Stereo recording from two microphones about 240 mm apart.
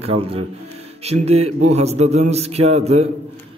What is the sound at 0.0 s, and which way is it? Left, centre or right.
A man's voice, right.